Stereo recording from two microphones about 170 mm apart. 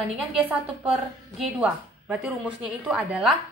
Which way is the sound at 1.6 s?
5° right (ahead or behind).